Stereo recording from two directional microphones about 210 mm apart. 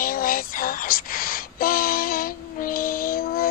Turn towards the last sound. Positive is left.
turn(degrees=45)  # may be behind; listen again after turning